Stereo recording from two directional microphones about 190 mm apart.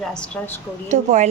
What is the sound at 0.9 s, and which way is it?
Speech, 40° right (ahead or behind).